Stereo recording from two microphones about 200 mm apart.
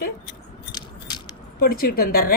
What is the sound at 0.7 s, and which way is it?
Biting, 20° left (ahead or behind).